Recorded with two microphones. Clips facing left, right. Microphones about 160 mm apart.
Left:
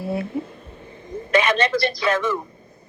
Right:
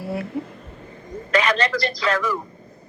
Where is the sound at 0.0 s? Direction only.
20° left (ahead or behind).